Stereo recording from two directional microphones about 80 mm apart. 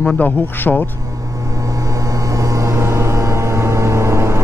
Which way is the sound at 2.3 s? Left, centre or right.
Right.